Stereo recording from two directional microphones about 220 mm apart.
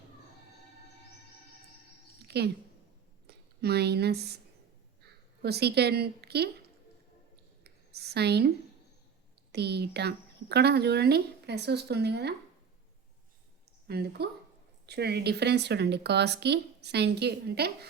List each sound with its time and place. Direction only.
2.2 s a sound: 50° right (ahead or behind)
3.2 s speech: 50° right (ahead or behind)
5.4 s speech: 45° right (ahead or behind)
7.6 s a sound: 45° right (ahead or behind)
9.5 s speech: 50° right (ahead or behind)
13.8 s speech: 45° right (ahead or behind)